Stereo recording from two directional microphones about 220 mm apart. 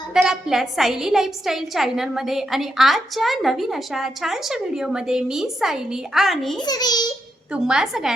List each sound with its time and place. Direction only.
0.1 s a woman's voice: 5° right (ahead or behind)
6.6 s a child's voice: 20° left (ahead or behind)
7.5 s a woman's voice: 5° right (ahead or behind)